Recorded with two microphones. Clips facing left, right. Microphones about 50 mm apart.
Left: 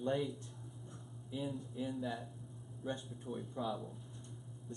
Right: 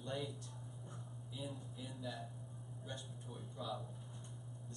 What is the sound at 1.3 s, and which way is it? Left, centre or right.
A man's voice, left.